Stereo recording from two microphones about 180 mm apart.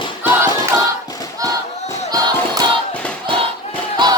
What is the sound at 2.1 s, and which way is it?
Music, 20° right (ahead or behind).